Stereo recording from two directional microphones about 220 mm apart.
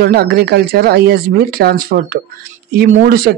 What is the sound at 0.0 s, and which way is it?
Speech, 45° right (ahead or behind).